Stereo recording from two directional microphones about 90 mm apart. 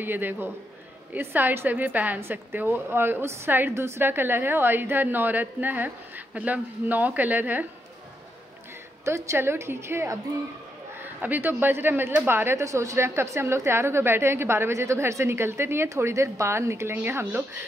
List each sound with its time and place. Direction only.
0.0 s a woman's voice: 20° right (ahead or behind)
9.0 s a woman's voice: 30° right (ahead or behind)